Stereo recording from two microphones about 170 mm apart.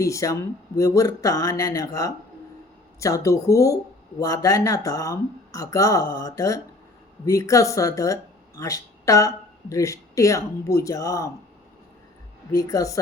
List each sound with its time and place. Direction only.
0.0 s speech: 20° left (ahead or behind)
12.7 s speech: 20° left (ahead or behind)